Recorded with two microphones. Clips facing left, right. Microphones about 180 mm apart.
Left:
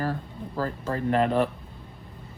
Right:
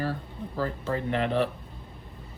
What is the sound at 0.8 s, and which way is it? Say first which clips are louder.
Speech: left 6 dB; 45° left (ahead or behind).